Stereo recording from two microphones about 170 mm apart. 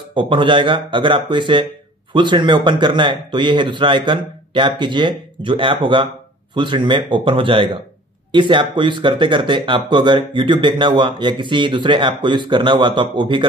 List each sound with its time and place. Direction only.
0.1 s speech: 30° right (ahead or behind)